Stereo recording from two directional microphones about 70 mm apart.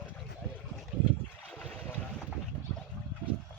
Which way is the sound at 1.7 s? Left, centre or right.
Centre.